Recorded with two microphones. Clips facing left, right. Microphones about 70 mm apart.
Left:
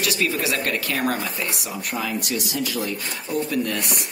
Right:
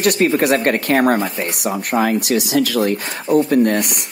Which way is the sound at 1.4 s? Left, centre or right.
Right.